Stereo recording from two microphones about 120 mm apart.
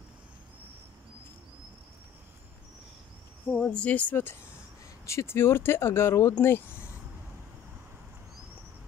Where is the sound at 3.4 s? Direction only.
10° left (ahead or behind).